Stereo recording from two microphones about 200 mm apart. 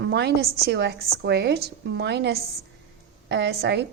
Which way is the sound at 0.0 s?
60° right (ahead or behind).